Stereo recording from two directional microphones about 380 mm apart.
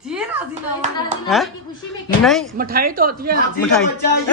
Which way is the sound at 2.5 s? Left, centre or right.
Right.